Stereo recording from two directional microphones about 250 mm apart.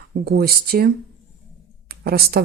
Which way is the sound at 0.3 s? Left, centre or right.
Right.